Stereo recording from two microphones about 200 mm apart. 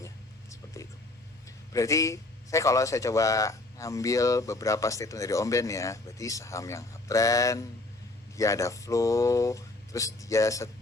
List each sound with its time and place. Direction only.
0.5 s whispering: 15° left (ahead or behind)
1.7 s a man's voice: 15° left (ahead or behind)